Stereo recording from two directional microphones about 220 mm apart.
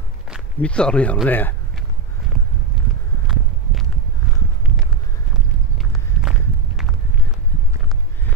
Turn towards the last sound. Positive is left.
turn(degrees=0)  # may be behind; listen again after turning